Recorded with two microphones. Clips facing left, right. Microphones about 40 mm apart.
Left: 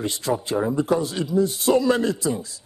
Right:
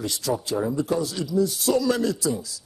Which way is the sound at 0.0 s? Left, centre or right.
Left.